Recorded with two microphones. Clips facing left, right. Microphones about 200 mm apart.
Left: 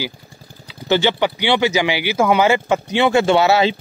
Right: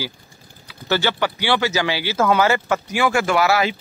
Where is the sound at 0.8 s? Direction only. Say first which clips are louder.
Left 4 dB; 20° left (ahead or behind).